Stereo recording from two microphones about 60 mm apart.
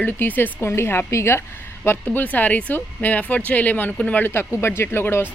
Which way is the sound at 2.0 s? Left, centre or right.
Left.